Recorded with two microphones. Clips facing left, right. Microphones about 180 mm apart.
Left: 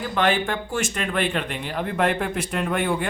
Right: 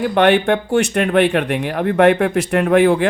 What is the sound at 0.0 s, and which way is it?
Speech, 65° right (ahead or behind).